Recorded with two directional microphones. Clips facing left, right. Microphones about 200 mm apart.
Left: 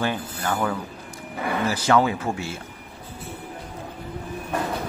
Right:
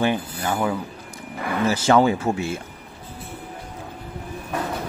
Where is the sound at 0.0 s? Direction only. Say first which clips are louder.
Right 4 dB; 15° right (ahead or behind).